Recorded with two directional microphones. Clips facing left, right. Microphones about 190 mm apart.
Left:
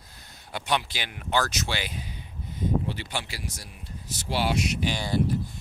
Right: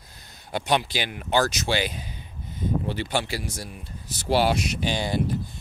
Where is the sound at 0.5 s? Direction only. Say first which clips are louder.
Right 4 dB; 35° right (ahead or behind).